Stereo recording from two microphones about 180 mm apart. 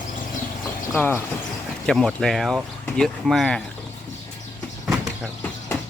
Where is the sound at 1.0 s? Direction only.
10° left (ahead or behind).